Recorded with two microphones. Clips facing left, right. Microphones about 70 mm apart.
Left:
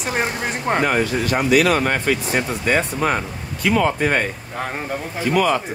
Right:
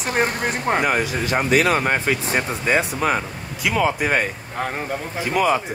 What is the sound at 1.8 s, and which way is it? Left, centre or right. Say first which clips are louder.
Speech: left 1 dB; centre.